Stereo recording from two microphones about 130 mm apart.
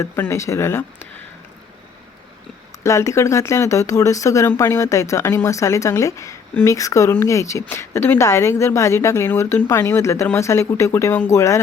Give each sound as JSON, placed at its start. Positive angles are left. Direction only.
{"t": 0.0, "sound": "speech", "side_deg": 20}
{"t": 2.8, "sound": "speech", "side_deg": 20}